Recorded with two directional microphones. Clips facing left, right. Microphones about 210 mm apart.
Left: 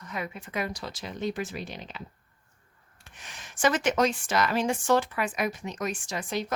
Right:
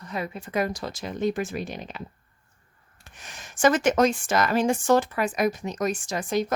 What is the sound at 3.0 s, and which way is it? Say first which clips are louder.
Speech: right 3 dB; 45° right (ahead or behind).